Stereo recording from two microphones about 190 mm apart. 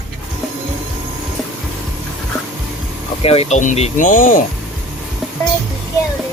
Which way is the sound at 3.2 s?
30° left (ahead or behind).